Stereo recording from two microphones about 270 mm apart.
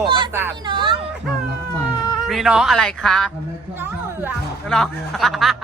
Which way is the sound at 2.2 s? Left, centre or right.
Centre.